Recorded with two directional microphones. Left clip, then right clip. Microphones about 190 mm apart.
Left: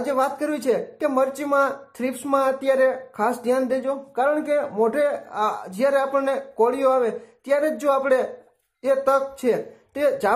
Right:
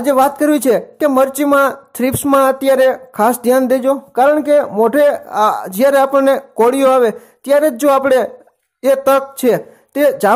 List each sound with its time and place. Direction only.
0.0 s speech: 45° right (ahead or behind)